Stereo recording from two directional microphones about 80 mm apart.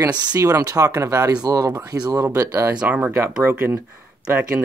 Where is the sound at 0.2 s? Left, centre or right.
Right.